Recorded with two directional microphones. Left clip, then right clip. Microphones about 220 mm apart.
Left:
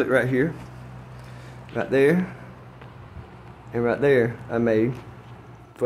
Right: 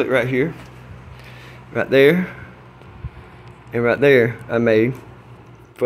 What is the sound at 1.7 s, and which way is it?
Speech, 10° right (ahead or behind).